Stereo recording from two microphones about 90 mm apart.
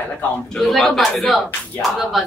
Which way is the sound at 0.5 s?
5° left (ahead or behind).